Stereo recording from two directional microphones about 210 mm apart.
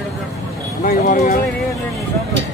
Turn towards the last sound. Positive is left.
turn(degrees=40)  # may be behind; listen again after turning